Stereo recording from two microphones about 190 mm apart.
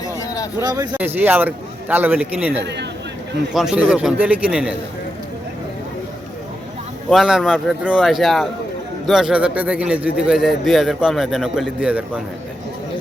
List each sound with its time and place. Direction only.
0.6 s speech: 20° right (ahead or behind)
0.9 s a man's voice: 10° right (ahead or behind)
7.1 s a man's voice: centre (ahead or behind)